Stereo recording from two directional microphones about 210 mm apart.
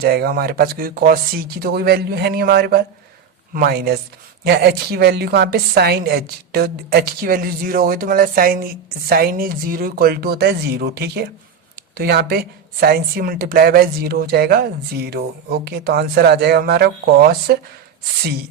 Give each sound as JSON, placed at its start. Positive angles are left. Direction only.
{"t": 0.0, "sound": "a woman's voice", "side_deg": -50}